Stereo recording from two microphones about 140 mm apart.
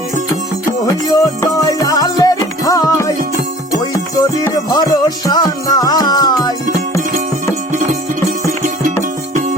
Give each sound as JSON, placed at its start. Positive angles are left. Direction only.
{"t": 0.9, "sound": "music", "side_deg": 25}
{"t": 4.7, "sound": "music", "side_deg": 30}